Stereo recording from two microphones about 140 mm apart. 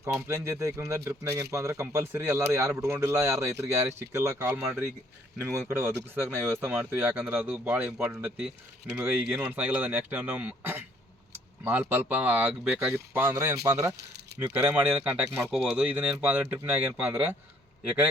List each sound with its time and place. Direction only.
0.0 s speech: 15° right (ahead or behind)